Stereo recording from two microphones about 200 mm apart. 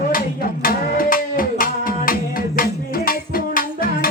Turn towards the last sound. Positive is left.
turn(degrees=45)  # may be behind; listen again after turning